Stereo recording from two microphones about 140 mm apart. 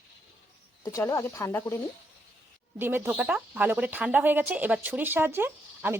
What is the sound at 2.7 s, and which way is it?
Speech, 15° right (ahead or behind).